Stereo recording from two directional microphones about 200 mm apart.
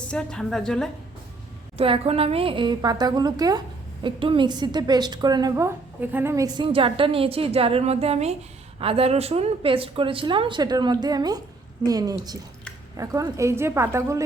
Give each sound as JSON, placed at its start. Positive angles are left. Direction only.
{"t": 0.1, "sound": "a woman's voice", "side_deg": 5}
{"t": 1.8, "sound": "a woman's voice", "side_deg": -30}